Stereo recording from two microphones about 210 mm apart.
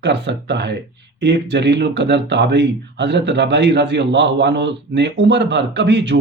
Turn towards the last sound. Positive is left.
turn(degrees=-55)  # may be behind; listen again after turning